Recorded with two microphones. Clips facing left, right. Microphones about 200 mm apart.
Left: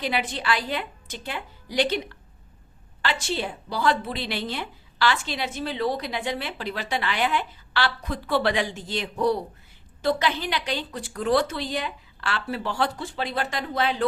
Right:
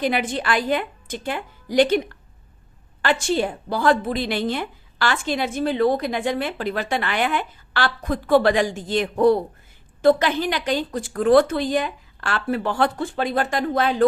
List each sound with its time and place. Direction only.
0.0 s a woman's voice: 50° right (ahead or behind)
3.0 s a woman's voice: 50° right (ahead or behind)